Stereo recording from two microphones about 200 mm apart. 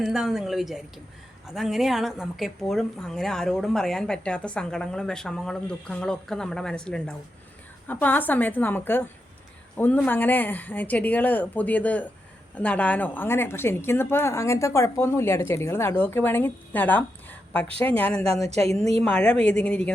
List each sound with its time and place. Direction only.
0.0 s a woman's voice: centre (ahead or behind)
18.4 s speech: 35° right (ahead or behind)
19.0 s speech: 5° left (ahead or behind)